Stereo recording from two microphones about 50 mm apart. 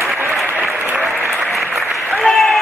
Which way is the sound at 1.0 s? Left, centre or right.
Centre.